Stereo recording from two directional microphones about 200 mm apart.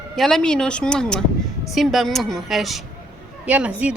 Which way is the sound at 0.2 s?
Centre (ahead or behind).